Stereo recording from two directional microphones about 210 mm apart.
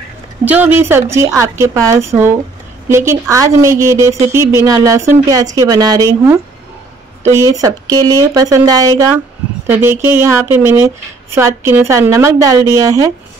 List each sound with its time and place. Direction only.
0.5 s speech: 10° right (ahead or behind)